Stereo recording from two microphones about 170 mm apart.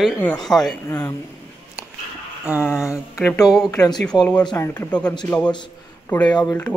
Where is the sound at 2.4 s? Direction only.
5° right (ahead or behind).